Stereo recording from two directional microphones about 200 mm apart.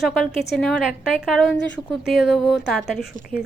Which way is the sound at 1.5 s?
60° left (ahead or behind).